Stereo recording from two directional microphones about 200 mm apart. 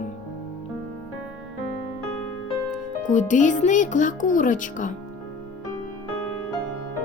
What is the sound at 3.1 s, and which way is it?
Speech, 35° left (ahead or behind).